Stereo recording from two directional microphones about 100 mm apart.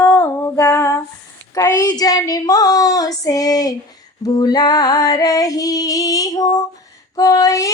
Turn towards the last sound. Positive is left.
turn(degrees=35)  # may be behind; listen again after turning